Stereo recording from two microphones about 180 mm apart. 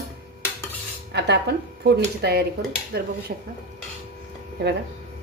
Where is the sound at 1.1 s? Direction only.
70° right (ahead or behind).